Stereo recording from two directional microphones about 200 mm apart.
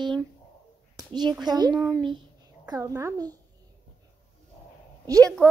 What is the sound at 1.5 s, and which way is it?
Speech, 20° right (ahead or behind).